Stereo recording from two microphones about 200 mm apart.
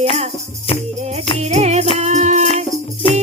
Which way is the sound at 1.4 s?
35° right (ahead or behind).